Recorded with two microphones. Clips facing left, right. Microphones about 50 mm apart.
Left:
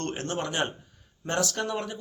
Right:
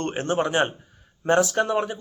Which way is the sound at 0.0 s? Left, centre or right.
Right.